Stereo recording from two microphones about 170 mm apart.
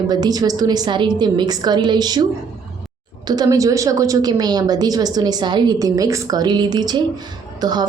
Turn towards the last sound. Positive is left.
turn(degrees=-25)  # may be behind; listen again after turning